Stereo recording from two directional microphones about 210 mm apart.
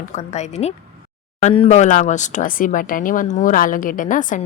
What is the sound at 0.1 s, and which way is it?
Speech, 35° left (ahead or behind).